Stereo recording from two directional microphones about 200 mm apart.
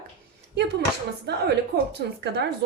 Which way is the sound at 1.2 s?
55° right (ahead or behind).